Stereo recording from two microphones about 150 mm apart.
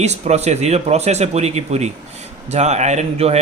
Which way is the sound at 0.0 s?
45° right (ahead or behind).